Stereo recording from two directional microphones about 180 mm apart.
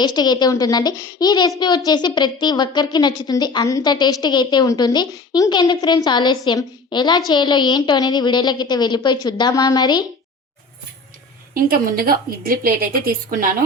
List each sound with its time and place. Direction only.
0.0 s a child's voice: 25° left (ahead or behind)
11.5 s a woman's voice: 55° right (ahead or behind)